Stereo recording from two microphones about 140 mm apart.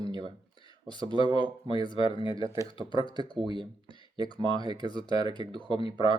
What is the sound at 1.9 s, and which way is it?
Speech, 35° left (ahead or behind).